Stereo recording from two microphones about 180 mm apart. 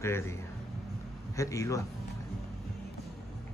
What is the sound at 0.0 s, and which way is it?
Speech, 15° left (ahead or behind).